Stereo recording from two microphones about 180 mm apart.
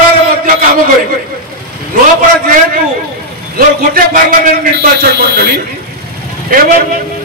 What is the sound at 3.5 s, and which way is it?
A man's voice, 55° right (ahead or behind).